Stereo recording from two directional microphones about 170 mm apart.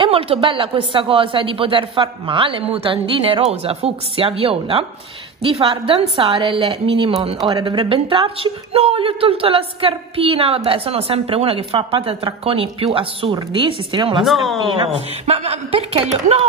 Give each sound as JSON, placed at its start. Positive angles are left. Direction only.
{"t": 0.0, "sound": "a woman's voice", "side_deg": -30}
{"t": 14.2, "sound": "speech", "side_deg": 0}
{"t": 14.9, "sound": "a woman's voice", "side_deg": -35}